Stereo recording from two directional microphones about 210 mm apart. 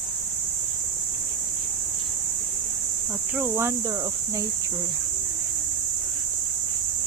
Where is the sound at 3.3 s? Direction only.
10° right (ahead or behind).